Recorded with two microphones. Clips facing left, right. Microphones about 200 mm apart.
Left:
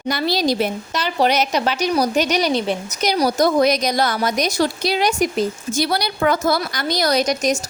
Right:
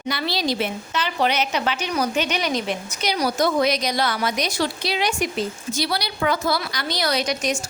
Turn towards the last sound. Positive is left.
turn(degrees=40)  # may be behind; listen again after turning